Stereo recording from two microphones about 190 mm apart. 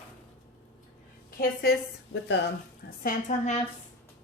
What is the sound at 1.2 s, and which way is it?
A woman's voice, 50° left (ahead or behind).